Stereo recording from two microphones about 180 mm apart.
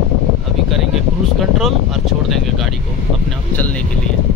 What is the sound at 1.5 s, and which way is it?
Speech, centre (ahead or behind).